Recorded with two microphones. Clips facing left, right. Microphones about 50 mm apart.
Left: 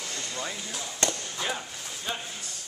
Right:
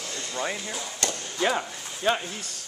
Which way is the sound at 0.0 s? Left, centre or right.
Centre.